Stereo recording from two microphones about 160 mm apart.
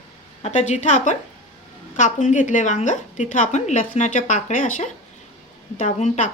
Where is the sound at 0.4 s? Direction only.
45° left (ahead or behind).